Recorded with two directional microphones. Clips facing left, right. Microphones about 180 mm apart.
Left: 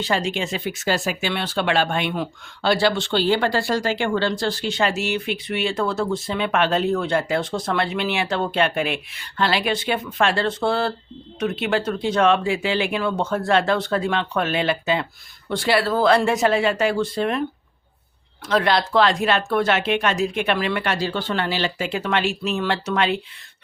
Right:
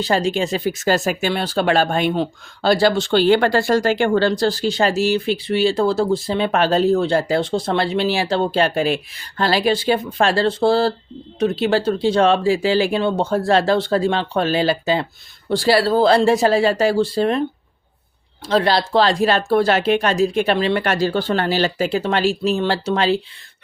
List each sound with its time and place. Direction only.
0.0 s speech: 40° right (ahead or behind)
18.4 s speech: 30° right (ahead or behind)
20.8 s speech: 45° right (ahead or behind)